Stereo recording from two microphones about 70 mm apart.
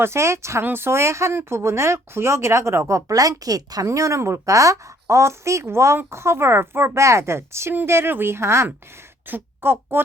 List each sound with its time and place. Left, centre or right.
0.0 s speech: right
3.8 s speech: right